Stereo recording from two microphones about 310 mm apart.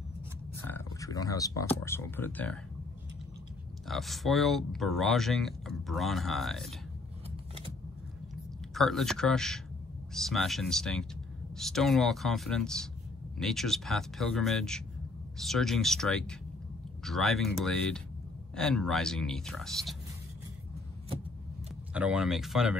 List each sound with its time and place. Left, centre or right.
0.7 s speech: centre
3.8 s speech: centre
7.2 s vehicle: centre
8.7 s speech: centre
21.9 s speech: centre